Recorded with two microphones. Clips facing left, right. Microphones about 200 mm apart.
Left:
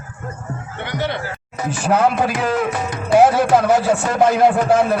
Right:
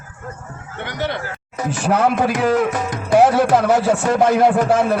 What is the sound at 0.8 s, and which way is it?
Speech, 45° right (ahead or behind).